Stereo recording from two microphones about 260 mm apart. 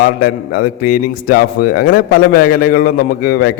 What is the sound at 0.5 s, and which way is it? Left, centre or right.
A man's voice, left.